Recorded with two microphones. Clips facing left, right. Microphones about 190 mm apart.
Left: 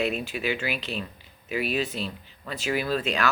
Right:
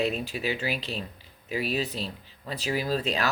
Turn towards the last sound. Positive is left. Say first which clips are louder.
# left 1 dB
turn(degrees=-35)  # may be behind; listen again after turning